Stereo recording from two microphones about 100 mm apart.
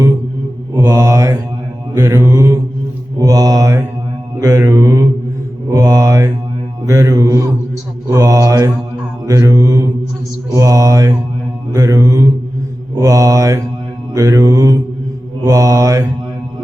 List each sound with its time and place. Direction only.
0.9 s mantra: 30° right (ahead or behind)